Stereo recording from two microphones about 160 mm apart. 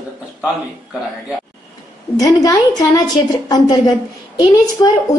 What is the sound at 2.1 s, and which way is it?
A woman's voice, 25° left (ahead or behind).